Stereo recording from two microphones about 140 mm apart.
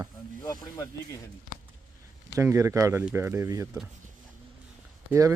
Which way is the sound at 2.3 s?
20° right (ahead or behind).